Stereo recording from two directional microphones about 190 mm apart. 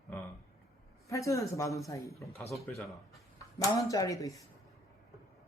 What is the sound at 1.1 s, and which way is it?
Speech, 15° left (ahead or behind).